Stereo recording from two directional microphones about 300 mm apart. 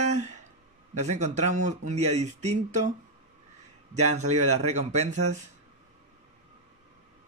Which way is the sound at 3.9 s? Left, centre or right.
Right.